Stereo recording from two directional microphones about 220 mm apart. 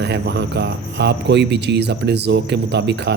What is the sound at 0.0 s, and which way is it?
Speech, 50° right (ahead or behind).